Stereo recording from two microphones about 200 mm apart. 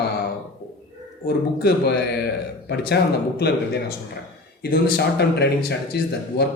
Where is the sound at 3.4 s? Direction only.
55° left (ahead or behind).